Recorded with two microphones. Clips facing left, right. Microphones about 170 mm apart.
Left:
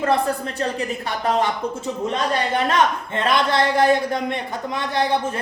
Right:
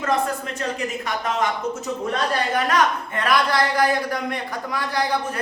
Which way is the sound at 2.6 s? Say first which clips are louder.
Left 1 dB; 25° left (ahead or behind).